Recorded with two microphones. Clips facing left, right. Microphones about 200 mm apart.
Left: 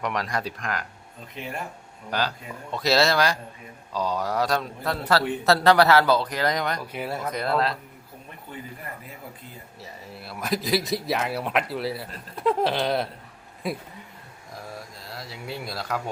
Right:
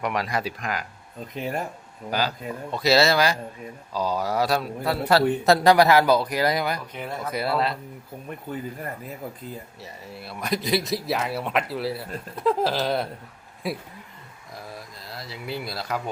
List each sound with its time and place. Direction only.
0.0 s speech: 5° right (ahead or behind)
2.0 s a man's voice: 5° right (ahead or behind)
6.9 s speech: 5° left (ahead or behind)
7.3 s speech: 5° right (ahead or behind)
9.8 s speech: centre (ahead or behind)
15.0 s speech: centre (ahead or behind)